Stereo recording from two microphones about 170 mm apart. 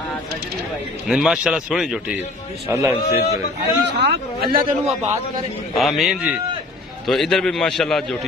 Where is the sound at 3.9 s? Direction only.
85° right.